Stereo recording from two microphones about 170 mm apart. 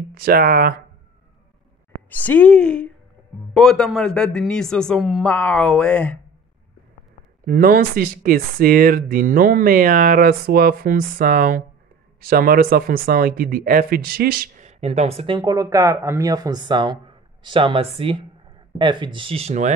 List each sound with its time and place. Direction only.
0.1 s speech: 60° right (ahead or behind)
2.0 s speech: 10° left (ahead or behind)
7.4 s speech: 55° right (ahead or behind)
14.7 s speech: 40° right (ahead or behind)